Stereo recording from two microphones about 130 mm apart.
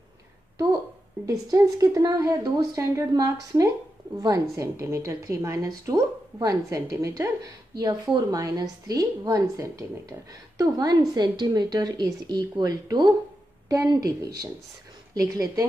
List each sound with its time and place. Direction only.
1.2 s a woman's voice: 25° right (ahead or behind)